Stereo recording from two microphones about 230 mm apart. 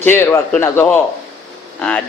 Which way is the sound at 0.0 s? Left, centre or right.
Centre.